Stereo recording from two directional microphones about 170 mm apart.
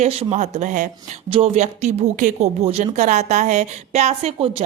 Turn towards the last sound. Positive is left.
turn(degrees=-35)  # may be behind; listen again after turning